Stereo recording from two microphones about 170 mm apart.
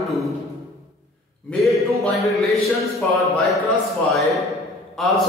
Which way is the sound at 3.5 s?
15° left (ahead or behind).